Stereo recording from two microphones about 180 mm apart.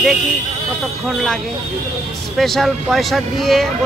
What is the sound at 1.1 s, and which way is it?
Speech, centre (ahead or behind).